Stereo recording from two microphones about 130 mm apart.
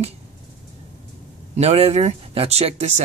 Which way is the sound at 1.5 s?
55° right (ahead or behind).